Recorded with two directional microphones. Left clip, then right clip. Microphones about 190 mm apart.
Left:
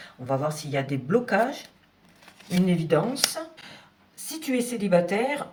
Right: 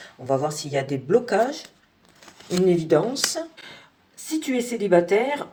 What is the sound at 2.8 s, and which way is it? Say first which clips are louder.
Speech: right 3 dB; 30° right (ahead or behind).